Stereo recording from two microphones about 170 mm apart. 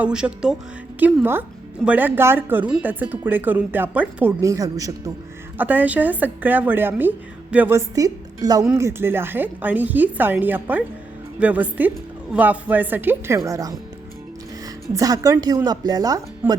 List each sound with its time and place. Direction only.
0.0 s a woman's voice: 5° right (ahead or behind)
14.9 s a woman's voice: 20° right (ahead or behind)
16.4 s speech: 10° right (ahead or behind)